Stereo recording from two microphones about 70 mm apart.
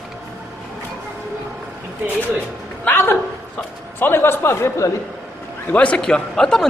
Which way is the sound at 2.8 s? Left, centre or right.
Left.